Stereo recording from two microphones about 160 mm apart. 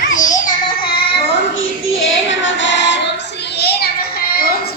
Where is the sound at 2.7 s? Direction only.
90° left; by 4.7 s 70° left (ahead or behind).